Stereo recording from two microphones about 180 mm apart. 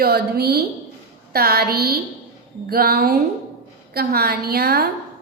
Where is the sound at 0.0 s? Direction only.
60° right (ahead or behind).